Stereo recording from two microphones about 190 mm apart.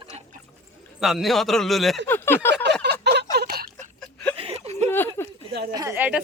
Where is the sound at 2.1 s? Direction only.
10° left (ahead or behind).